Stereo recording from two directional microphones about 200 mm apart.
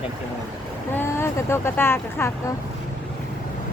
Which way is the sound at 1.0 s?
10° left (ahead or behind).